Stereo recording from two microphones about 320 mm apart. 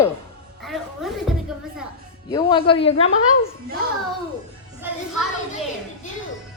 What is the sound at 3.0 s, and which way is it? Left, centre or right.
Speech, left.